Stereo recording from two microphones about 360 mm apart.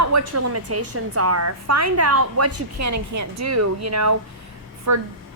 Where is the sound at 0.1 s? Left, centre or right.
Right.